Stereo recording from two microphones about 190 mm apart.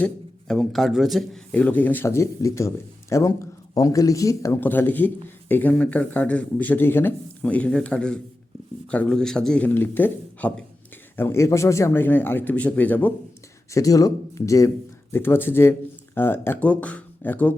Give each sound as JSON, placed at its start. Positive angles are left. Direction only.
{"t": 0.0, "sound": "speech", "side_deg": 5}